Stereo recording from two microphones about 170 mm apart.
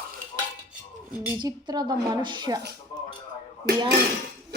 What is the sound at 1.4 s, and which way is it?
Speech, 25° right (ahead or behind).